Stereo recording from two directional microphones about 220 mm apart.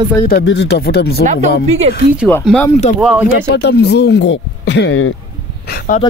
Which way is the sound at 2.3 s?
5° left (ahead or behind).